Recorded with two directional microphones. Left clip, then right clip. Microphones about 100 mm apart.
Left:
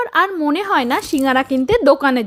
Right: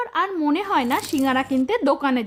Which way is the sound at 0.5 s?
30° left (ahead or behind).